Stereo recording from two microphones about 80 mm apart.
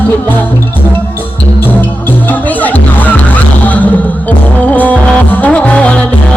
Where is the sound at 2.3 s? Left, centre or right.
Left.